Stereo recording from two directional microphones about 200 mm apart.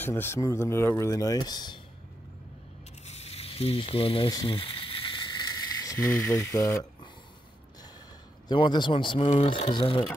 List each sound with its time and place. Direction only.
0.0 s speech: 10° left (ahead or behind)
3.1 s a sound: 30° left (ahead or behind)
8.5 s speech: 20° left (ahead or behind)